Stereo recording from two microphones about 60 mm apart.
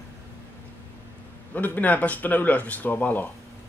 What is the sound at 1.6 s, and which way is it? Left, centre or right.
Speech, left.